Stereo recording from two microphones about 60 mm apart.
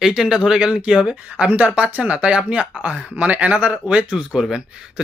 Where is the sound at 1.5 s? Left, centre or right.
Right.